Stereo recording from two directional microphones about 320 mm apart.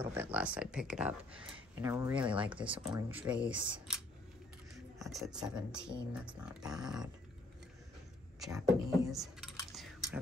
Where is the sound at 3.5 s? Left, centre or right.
Centre.